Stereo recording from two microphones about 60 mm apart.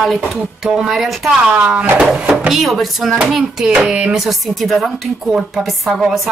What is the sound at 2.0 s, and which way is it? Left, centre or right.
Hands, centre.